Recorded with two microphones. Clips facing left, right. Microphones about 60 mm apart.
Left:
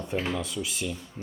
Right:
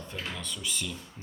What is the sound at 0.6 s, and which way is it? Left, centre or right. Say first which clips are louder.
Speech: left 4 dB; centre.